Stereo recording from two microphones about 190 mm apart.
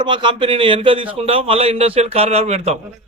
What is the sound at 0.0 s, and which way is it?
A man's voice, 25° right (ahead or behind).